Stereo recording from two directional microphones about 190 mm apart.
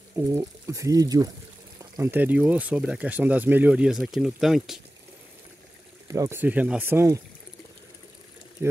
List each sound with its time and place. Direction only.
0.1 s speech: 15° right (ahead or behind)
6.0 s speech: 15° right (ahead or behind)